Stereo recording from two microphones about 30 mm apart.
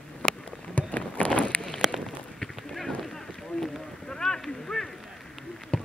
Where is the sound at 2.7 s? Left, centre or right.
Centre.